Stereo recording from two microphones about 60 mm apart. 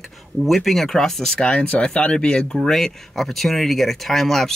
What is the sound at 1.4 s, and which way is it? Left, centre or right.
Speech, centre.